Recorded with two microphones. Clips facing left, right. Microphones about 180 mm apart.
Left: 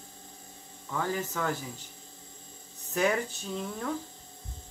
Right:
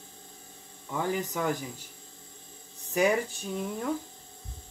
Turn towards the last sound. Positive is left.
turn(degrees=-15)  # may be behind; listen again after turning